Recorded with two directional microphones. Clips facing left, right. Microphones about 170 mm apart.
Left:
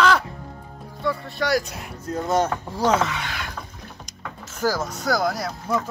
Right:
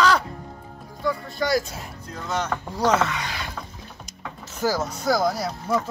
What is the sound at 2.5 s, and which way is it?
Speech, 10° left (ahead or behind).